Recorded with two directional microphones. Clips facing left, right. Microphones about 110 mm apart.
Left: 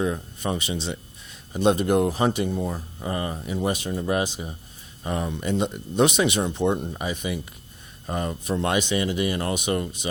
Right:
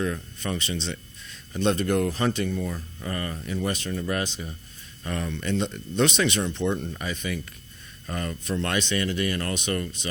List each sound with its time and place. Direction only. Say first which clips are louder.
0.0 s speech: left 3 dB; 15° left (ahead or behind)
2.5 s speech: left 2 dB; 30° left (ahead or behind)
3.1 s speech: left 3 dB; 20° left (ahead or behind)